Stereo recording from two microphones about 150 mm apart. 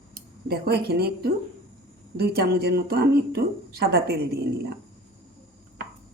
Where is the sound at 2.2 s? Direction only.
90° right.